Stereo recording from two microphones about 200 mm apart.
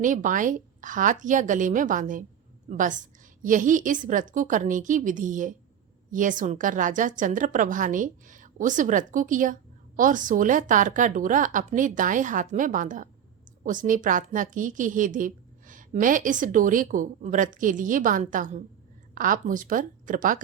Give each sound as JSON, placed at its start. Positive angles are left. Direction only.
{"t": 0.0, "sound": "a woman's voice", "side_deg": -40}